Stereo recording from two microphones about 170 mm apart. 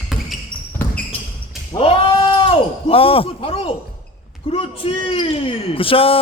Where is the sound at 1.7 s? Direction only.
35° left (ahead or behind).